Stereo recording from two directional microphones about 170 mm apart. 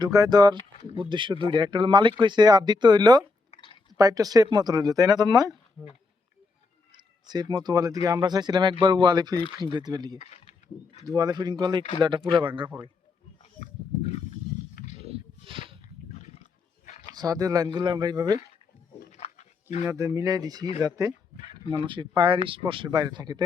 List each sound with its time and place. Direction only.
0.0 s speech: 20° right (ahead or behind)
3.5 s chewing: 30° left (ahead or behind)
3.9 s speech: 20° right (ahead or behind)
6.9 s speech: 25° right (ahead or behind)
10.2 s speech: 35° left (ahead or behind)
11.0 s speech: 20° right (ahead or behind)
14.0 s a sound: 40° left (ahead or behind)
15.0 s a sound: 35° right (ahead or behind)
16.3 s wild animals: 45° left (ahead or behind)
17.2 s speech: 20° right (ahead or behind)
19.1 s wild animals: 40° left (ahead or behind)
19.8 s speech: 20° right (ahead or behind)